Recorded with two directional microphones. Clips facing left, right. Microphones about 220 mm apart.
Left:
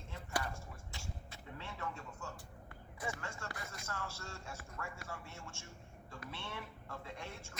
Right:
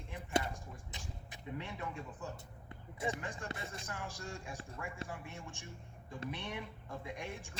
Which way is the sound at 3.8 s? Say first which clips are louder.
Right 1 dB; 15° right (ahead or behind).